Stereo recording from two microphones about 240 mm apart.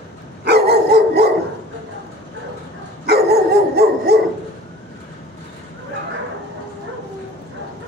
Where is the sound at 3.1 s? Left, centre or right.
Right.